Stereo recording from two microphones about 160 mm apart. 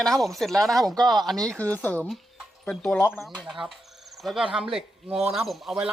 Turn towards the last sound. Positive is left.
turn(degrees=0)  # may be behind; listen again after turning